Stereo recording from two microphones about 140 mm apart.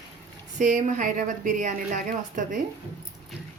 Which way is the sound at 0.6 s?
65° right (ahead or behind).